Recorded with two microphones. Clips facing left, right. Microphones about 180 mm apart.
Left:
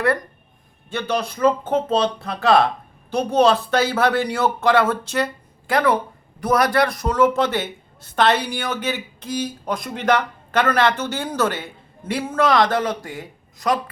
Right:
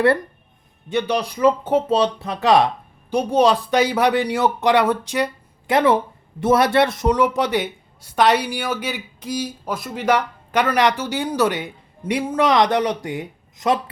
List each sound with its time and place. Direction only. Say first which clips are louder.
0.9 s speech: right 3 dB; 15° right (ahead or behind)